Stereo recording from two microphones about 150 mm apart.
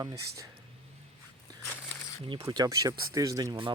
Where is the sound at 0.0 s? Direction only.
20° right (ahead or behind).